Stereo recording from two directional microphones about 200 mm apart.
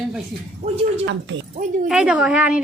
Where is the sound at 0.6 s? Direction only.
30° right (ahead or behind).